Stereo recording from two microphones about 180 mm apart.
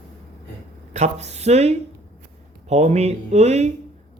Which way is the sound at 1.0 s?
40° right (ahead or behind).